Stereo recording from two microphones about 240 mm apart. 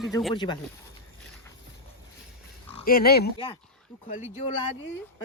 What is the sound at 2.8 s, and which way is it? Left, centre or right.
Speech, left.